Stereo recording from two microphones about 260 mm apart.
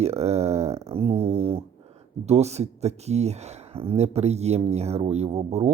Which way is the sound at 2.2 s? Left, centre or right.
Right.